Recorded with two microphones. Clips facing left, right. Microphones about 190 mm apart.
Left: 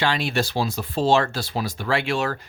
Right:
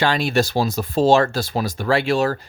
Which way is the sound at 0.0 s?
45° right (ahead or behind).